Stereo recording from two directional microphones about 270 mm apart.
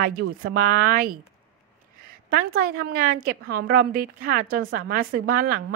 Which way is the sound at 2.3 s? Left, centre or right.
Right.